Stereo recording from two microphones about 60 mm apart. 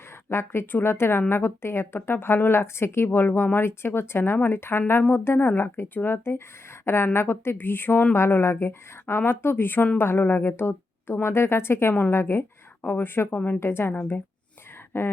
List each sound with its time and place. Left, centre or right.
0.3 s a woman's voice: left